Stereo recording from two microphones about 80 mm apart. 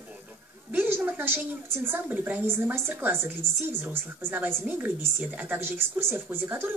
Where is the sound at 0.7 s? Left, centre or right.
Right.